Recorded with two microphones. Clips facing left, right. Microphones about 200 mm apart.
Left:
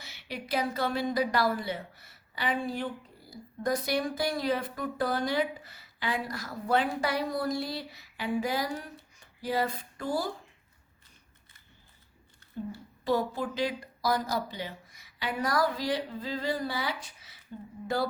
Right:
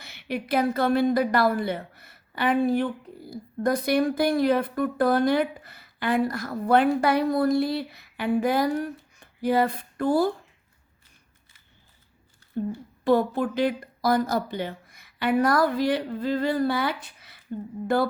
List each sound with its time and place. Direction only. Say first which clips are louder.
0.0 s a woman's voice: right 9 dB; 55° right (ahead or behind)
13.1 s a woman's voice: right 7 dB; 55° right (ahead or behind)